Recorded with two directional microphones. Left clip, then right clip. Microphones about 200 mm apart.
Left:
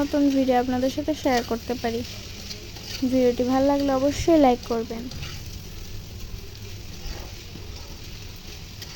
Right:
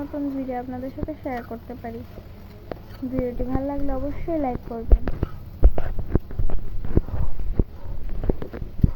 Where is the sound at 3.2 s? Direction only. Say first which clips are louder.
Left 8 dB; 75° left (ahead or behind).